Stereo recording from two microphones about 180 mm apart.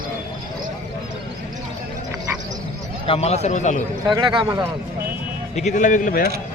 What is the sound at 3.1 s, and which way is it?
Speech, 35° left (ahead or behind).